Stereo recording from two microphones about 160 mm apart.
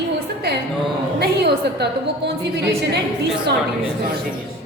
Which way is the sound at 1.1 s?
90° right.